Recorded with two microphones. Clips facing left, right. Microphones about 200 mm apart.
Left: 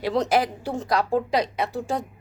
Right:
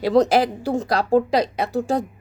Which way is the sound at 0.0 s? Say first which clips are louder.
Right 6 dB; 35° right (ahead or behind).